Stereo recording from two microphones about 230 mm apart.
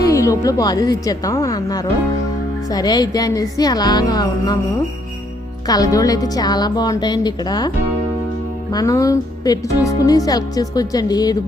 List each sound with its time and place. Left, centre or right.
0.0 s a woman's voice: centre
5.6 s speech: centre
8.7 s speech: centre